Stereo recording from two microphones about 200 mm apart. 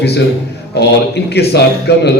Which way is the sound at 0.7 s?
55° left (ahead or behind).